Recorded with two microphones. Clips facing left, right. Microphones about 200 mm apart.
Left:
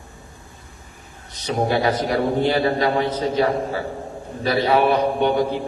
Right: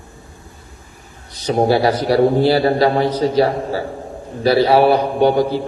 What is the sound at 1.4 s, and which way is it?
A man's voice, 35° right (ahead or behind).